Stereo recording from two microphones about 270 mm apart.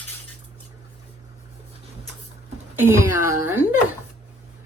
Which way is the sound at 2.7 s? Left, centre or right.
Centre.